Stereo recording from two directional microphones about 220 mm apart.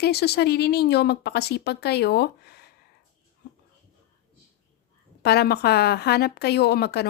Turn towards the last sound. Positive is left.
turn(degrees=45)  # may be behind; listen again after turning